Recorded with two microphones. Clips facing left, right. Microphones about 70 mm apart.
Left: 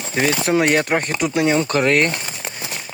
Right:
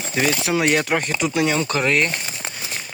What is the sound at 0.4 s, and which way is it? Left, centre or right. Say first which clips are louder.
Speech: left 3 dB; left.